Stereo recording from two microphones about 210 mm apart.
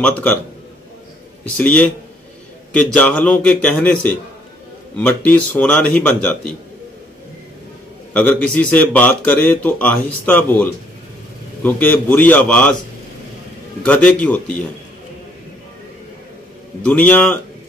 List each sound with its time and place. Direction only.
0.0 s speech: 10° left (ahead or behind)
1.6 s a man's voice: 5° left (ahead or behind)
8.1 s speech: 5° left (ahead or behind)
13.8 s a man's voice: 5° left (ahead or behind)
16.8 s speech: 5° left (ahead or behind)